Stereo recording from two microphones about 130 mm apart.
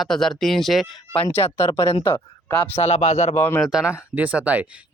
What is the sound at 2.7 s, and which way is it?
Speech, 55° left (ahead or behind).